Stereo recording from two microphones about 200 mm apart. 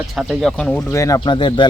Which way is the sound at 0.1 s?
Centre (ahead or behind).